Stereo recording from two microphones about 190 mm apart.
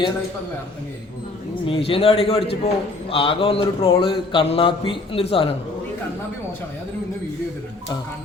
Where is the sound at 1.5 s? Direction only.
30° left (ahead or behind).